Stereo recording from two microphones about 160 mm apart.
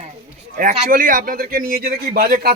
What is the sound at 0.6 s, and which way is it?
A man's voice, 55° right (ahead or behind).